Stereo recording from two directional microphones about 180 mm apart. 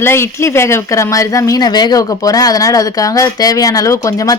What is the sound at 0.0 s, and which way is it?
A woman's voice, 15° left (ahead or behind).